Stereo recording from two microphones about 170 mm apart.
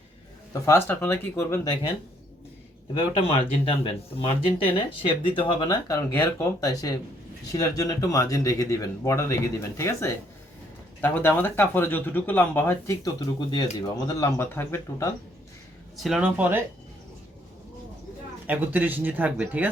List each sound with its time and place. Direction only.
0.6 s speech: 15° left (ahead or behind)
3.2 s speech: 35° left (ahead or behind); by 15.1 s 15° left (ahead or behind)
16.0 s speech: centre (ahead or behind)
18.4 s speech: 10° right (ahead or behind)